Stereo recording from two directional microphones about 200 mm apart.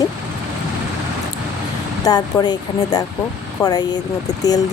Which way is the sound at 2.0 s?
20° left (ahead or behind).